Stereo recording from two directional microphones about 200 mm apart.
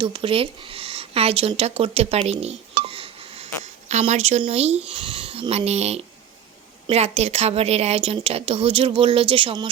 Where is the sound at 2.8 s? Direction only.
30° right (ahead or behind).